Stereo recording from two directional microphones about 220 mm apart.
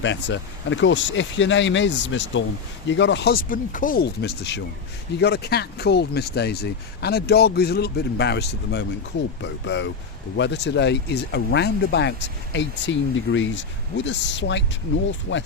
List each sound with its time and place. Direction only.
0.0 s speech: 55° left (ahead or behind)